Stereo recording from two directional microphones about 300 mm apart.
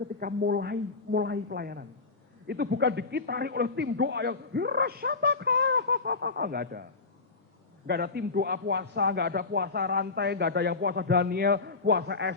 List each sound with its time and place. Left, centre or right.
0.2 s a man's voice: right
7.9 s a man's voice: right